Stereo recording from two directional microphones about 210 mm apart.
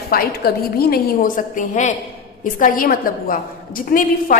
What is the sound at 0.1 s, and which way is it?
A woman's voice, 45° left (ahead or behind).